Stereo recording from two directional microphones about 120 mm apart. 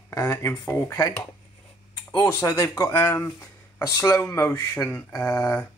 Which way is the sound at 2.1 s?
30° left (ahead or behind).